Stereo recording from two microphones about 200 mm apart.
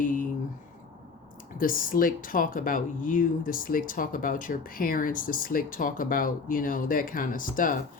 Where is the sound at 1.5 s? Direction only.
45° left (ahead or behind).